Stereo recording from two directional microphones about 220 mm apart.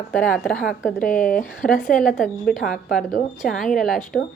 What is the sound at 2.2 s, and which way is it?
Speech, centre (ahead or behind).